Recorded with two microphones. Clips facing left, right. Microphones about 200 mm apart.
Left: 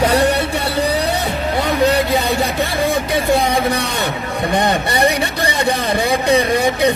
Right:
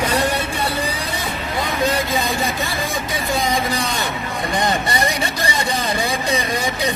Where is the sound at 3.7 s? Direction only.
65° left (ahead or behind).